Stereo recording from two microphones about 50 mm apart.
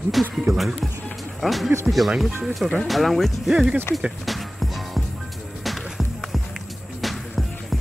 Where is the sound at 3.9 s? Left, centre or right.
Left.